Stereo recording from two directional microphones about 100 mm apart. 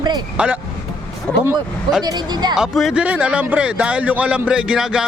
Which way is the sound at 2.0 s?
45° right (ahead or behind).